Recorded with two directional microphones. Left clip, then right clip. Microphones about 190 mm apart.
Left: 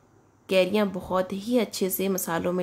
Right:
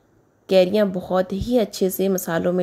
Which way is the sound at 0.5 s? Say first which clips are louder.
Right 6 dB; 20° right (ahead or behind).